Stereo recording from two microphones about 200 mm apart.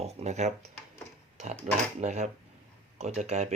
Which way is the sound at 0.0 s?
30° right (ahead or behind).